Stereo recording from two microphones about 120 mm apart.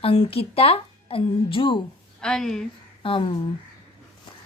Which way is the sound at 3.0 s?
50° left (ahead or behind).